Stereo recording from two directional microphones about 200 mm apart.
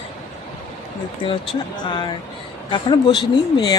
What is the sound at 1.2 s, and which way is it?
Speech, 25° left (ahead or behind).